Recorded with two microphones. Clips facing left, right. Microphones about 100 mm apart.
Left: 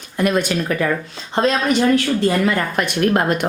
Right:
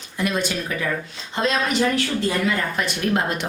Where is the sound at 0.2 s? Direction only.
55° left (ahead or behind).